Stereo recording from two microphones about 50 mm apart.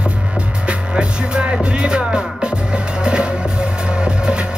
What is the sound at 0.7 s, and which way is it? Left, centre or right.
Music, centre.